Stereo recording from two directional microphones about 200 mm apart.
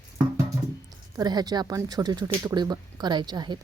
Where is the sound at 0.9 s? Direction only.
20° right (ahead or behind).